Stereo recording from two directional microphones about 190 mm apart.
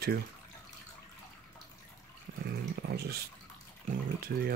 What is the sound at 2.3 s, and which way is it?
Speech, 55° right (ahead or behind).